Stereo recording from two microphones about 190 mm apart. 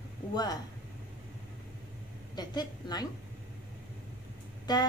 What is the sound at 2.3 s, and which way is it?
Speech, 20° left (ahead or behind).